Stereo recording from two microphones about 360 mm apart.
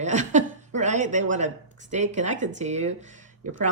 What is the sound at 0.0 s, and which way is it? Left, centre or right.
Chuckle, centre.